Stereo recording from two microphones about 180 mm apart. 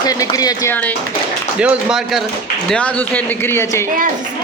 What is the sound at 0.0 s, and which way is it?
Speech, 20° left (ahead or behind).